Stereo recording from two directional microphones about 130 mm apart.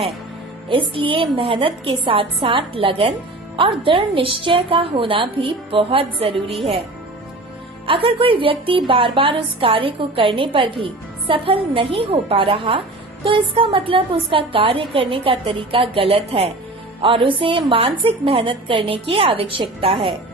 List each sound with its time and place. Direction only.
0.7 s a woman's voice: 40° right (ahead or behind)
7.9 s a woman's voice: 40° right (ahead or behind)